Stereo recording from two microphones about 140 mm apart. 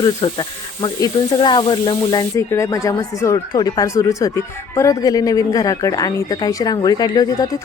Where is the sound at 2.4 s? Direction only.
20° left (ahead or behind).